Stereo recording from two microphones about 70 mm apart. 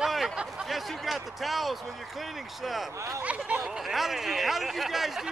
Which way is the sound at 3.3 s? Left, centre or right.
Centre.